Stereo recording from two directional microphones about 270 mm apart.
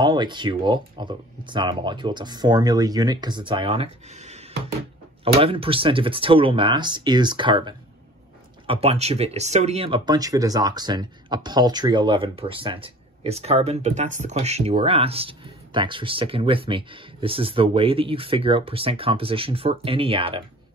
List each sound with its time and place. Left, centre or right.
0.0 s speech: centre